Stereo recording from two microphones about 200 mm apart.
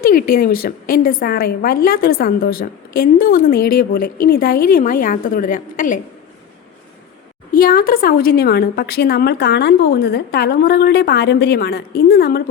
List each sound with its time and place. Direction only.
0.0 s a woman's voice: 45° left (ahead or behind)
7.5 s a woman's voice: 45° left (ahead or behind)